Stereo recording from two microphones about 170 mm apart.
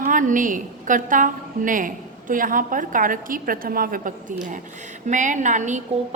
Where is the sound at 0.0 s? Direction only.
50° right (ahead or behind).